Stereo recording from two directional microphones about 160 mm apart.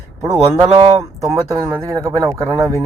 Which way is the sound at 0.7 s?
40° right (ahead or behind).